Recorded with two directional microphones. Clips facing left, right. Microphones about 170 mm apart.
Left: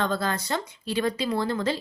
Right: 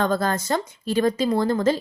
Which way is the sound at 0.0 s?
45° right (ahead or behind).